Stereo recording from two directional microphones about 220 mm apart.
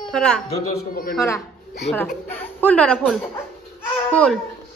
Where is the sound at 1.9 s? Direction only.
10° left (ahead or behind).